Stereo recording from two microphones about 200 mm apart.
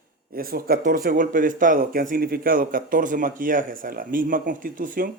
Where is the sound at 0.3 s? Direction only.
45° right (ahead or behind).